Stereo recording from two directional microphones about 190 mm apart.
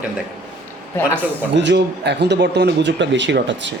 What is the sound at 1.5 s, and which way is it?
Speech, 65° right (ahead or behind).